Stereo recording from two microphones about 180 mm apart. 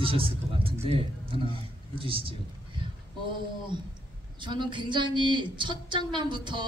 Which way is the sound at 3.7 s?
25° right (ahead or behind).